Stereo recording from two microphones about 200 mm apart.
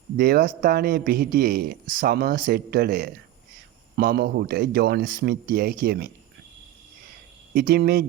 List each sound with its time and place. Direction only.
0.2 s a man's voice: 45° right (ahead or behind)
7.5 s a man's voice: 50° right (ahead or behind)